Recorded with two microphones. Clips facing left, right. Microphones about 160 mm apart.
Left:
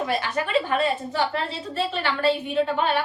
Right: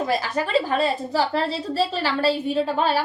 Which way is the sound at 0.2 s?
35° right (ahead or behind).